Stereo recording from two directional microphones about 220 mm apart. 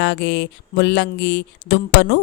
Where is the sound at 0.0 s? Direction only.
50° left (ahead or behind).